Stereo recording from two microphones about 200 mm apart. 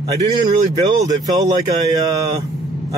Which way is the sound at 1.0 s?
20° right (ahead or behind).